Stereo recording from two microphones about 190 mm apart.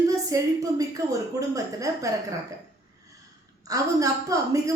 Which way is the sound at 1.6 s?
15° right (ahead or behind).